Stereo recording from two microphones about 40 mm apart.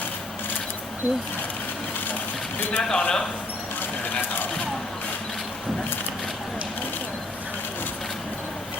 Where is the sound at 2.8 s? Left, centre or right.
Centre.